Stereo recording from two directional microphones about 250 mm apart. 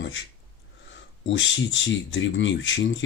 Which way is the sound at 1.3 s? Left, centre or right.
Left.